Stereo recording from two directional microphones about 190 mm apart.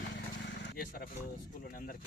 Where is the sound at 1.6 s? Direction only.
45° left (ahead or behind).